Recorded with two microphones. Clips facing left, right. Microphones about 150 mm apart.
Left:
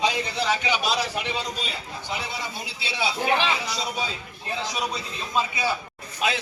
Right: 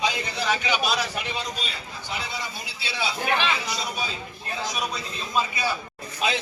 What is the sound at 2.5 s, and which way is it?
Speech, 25° left (ahead or behind).